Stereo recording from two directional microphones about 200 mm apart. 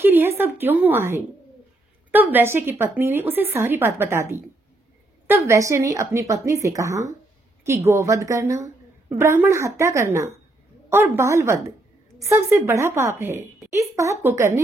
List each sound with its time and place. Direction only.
0.0 s a woman's voice: 10° right (ahead or behind)